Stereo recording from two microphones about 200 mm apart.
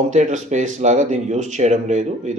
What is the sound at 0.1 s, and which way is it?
Speech, 40° right (ahead or behind).